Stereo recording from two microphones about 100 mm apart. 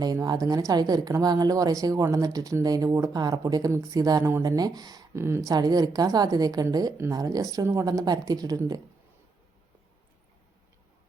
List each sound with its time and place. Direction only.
0.0 s speech: 40° right (ahead or behind)
4.3 s speech: 25° right (ahead or behind)
4.5 s speech: 40° right (ahead or behind)
5.1 s speech: 25° right (ahead or behind)
5.5 s speech: 40° right (ahead or behind)